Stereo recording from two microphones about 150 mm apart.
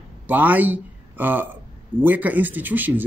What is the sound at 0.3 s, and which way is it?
A man's voice, 10° right (ahead or behind).